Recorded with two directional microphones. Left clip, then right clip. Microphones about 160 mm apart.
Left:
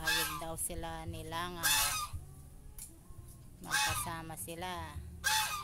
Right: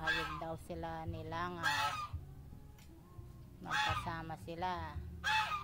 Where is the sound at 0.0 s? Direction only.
30° left (ahead or behind).